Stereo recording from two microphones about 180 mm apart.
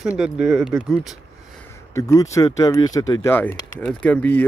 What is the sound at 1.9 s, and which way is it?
Speech, 20° left (ahead or behind).